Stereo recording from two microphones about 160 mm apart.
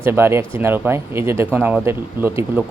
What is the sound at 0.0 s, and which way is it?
Speech, 15° right (ahead or behind).